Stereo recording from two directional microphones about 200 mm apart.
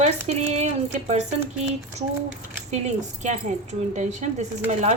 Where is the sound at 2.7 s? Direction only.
35° right (ahead or behind).